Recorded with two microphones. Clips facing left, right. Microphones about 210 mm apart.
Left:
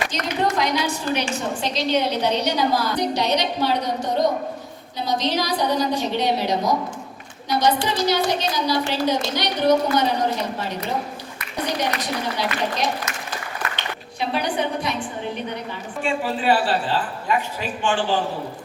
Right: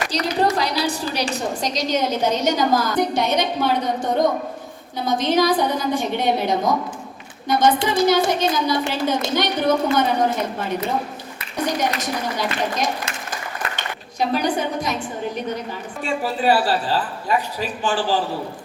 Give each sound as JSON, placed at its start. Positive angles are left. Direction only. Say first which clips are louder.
{"t": 0.1, "sound": "a woman's voice", "louder": "right 3 dB", "side_deg": -35}
{"t": 16.0, "sound": "speech", "louder": "right 1 dB", "side_deg": -40}